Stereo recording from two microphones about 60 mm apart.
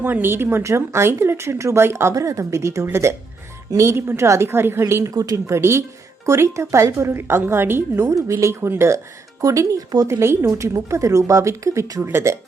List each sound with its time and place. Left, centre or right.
0.0 s a woman's voice: right
2.1 s speech: right
4.0 s a woman's voice: right
5.1 s speech: right
5.5 s a woman's voice: right
8.1 s speech: right
9.4 s speech: right
10.1 s a woman's voice: right